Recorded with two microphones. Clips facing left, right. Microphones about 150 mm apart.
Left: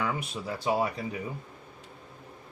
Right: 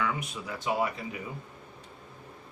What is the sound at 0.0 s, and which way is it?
Speech, 35° left (ahead or behind).